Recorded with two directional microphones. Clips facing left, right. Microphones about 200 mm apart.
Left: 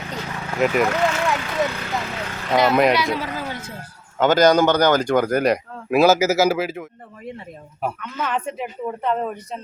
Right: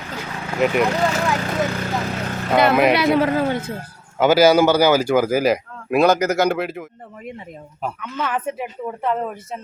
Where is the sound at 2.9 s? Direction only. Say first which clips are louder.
Right 7 dB; 60° right (ahead or behind).